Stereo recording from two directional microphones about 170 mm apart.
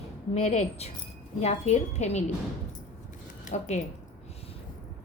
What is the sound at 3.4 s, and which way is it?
Speech, 45° left (ahead or behind).